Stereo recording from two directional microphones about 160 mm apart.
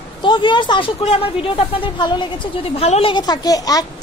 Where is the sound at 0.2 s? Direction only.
30° left (ahead or behind).